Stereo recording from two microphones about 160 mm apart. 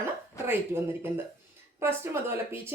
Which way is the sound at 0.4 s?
15° right (ahead or behind).